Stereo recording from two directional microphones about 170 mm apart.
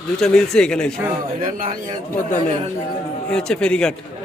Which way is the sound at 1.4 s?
50° right (ahead or behind).